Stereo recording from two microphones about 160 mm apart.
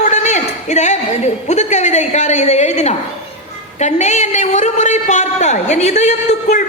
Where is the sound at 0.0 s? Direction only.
50° left (ahead or behind).